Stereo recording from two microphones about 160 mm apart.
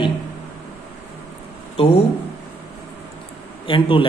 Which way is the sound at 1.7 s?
40° left (ahead or behind).